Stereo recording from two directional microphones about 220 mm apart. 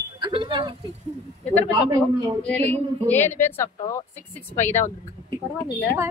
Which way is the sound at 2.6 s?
30° right (ahead or behind).